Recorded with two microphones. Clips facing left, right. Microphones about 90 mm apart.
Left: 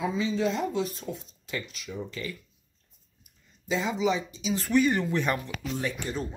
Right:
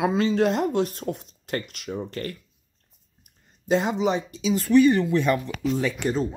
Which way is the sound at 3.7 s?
60° right (ahead or behind).